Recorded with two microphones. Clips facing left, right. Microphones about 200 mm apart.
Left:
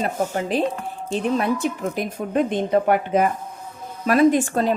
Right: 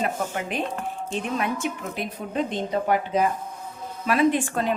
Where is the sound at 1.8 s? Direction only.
45° left (ahead or behind).